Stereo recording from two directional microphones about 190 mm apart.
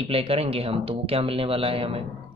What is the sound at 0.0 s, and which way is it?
Speech, 30° right (ahead or behind).